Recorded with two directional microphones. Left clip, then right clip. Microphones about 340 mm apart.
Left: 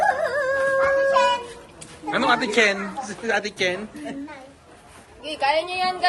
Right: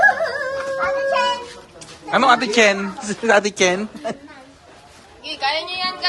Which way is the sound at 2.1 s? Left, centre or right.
Centre.